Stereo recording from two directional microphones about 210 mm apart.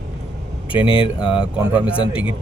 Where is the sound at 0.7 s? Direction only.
25° left (ahead or behind).